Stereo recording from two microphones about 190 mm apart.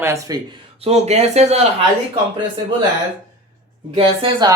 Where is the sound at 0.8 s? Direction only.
35° right (ahead or behind).